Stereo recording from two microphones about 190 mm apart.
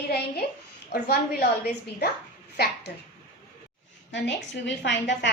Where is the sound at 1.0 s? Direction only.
55° left (ahead or behind).